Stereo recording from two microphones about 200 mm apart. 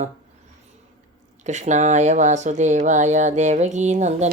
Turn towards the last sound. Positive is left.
turn(degrees=-35)  # may be behind; listen again after turning